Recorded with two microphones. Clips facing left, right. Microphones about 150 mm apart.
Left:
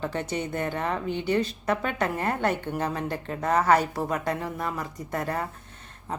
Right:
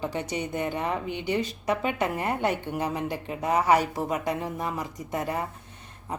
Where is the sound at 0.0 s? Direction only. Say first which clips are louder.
Left 1 dB; 15° right (ahead or behind).